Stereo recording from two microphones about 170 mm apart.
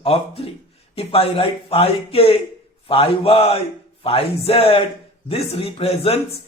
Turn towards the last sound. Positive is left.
turn(degrees=35)  # may be behind; listen again after turning